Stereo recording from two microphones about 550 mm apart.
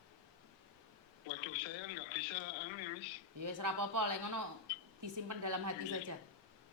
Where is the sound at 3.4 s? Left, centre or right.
Right.